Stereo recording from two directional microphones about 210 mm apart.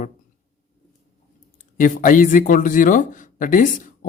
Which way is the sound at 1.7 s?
40° left (ahead or behind).